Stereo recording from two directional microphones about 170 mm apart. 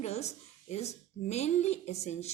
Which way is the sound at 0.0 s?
40° left (ahead or behind).